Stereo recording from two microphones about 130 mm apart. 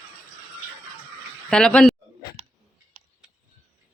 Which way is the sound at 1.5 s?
5° left (ahead or behind).